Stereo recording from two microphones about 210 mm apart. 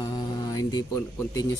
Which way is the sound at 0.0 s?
20° left (ahead or behind).